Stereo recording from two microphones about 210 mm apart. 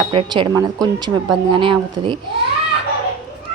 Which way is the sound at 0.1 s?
25° right (ahead or behind).